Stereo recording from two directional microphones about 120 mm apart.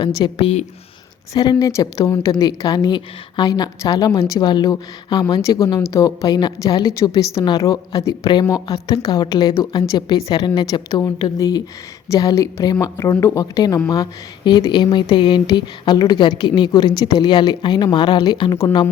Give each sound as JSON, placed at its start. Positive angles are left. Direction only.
{"t": 0.3, "sound": "speech", "side_deg": 55}
{"t": 1.3, "sound": "a woman's voice", "side_deg": 30}
{"t": 11.0, "sound": "a woman's voice", "side_deg": 30}